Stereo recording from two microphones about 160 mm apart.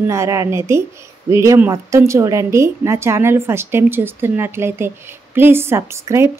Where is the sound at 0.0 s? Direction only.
20° right (ahead or behind).